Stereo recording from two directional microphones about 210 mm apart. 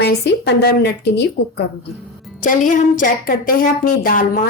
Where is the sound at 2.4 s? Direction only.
40° left (ahead or behind).